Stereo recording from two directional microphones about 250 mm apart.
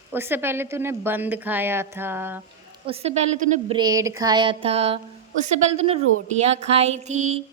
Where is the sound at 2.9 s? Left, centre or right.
Right.